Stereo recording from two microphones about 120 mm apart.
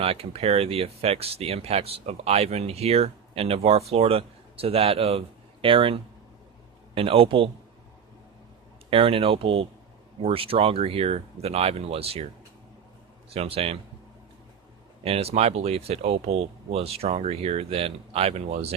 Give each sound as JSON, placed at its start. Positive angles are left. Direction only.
{"t": 0.0, "sound": "speech", "side_deg": -55}
{"t": 8.9, "sound": "speech", "side_deg": -50}
{"t": 13.3, "sound": "speech", "side_deg": -55}
{"t": 15.0, "sound": "speech", "side_deg": -55}